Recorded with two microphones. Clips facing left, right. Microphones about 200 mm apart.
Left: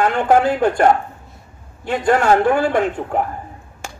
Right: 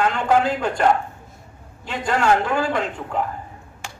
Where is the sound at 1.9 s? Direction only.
50° left (ahead or behind).